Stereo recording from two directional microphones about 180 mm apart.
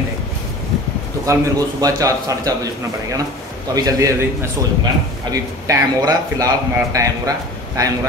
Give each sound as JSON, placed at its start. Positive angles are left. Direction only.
{"t": 1.2, "sound": "a man's voice", "side_deg": -20}